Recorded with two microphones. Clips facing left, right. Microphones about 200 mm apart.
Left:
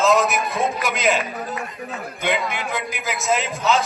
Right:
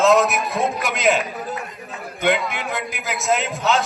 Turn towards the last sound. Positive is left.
turn(degrees=0)  # may be behind; listen again after turning